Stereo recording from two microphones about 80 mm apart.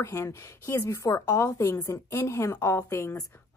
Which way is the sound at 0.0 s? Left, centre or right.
Left.